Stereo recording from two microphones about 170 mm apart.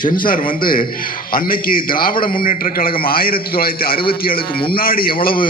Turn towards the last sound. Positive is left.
turn(degrees=60)  # may be behind; listen again after turning